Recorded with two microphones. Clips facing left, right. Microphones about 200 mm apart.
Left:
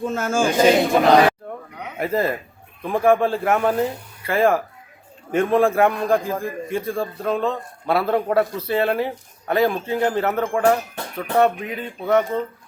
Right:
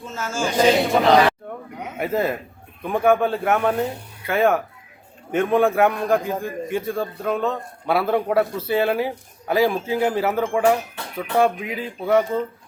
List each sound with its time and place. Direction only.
0.0 s a man's voice: 55° left (ahead or behind)
1.8 s a man's voice: centre (ahead or behind)